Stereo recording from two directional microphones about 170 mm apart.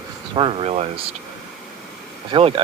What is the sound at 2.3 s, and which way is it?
Speech, 30° right (ahead or behind).